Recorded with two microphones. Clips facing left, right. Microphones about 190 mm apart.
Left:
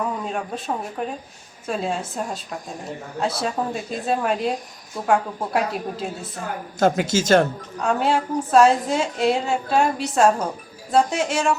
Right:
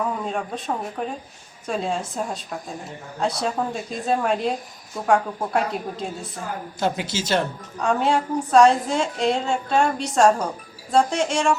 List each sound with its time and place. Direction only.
0.0 s a woman's voice: centre (ahead or behind)
6.7 s speech: 45° left (ahead or behind)
7.8 s a woman's voice: centre (ahead or behind)